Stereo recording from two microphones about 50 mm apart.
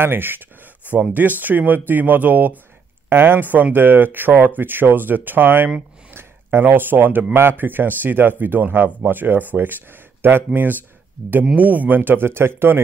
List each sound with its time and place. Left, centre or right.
0.0 s a man's voice: right